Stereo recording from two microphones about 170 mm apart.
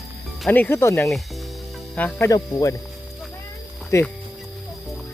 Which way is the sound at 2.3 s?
20° left (ahead or behind).